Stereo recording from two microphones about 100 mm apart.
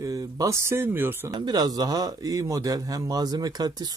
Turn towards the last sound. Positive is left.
turn(degrees=-40)  # may be behind; listen again after turning